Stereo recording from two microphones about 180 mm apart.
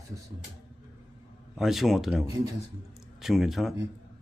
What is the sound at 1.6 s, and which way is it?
Speech, centre (ahead or behind).